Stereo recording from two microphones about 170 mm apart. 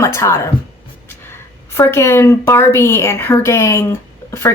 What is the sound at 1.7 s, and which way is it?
Speech, 15° left (ahead or behind).